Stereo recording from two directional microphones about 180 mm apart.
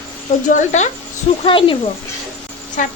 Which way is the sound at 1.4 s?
30° left (ahead or behind).